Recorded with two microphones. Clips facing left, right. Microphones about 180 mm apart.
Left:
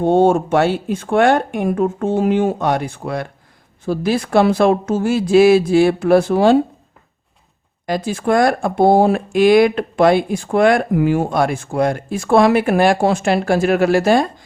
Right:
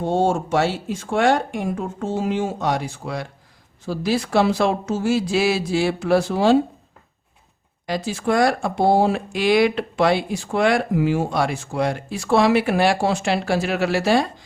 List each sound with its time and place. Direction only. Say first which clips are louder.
0.0 s speech: left 7 dB; 55° left (ahead or behind)
7.9 s speech: left 4 dB; 50° left (ahead or behind)